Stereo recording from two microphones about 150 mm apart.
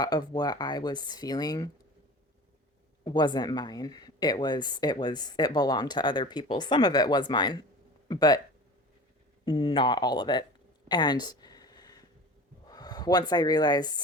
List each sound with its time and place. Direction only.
0.0 s speech: 25° left (ahead or behind)
3.0 s speech: 30° left (ahead or behind)
9.4 s speech: 35° left (ahead or behind)
10.8 s a sound: 30° left (ahead or behind)
12.6 s speech: 25° left (ahead or behind)